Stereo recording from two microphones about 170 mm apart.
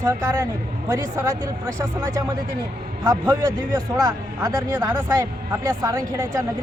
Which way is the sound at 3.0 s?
15° right (ahead or behind).